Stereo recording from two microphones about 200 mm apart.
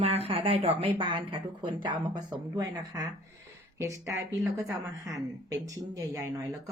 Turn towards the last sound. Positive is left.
turn(degrees=-15)  # may be behind; listen again after turning